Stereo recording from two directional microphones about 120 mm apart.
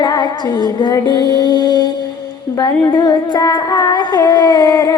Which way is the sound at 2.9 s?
35° left (ahead or behind).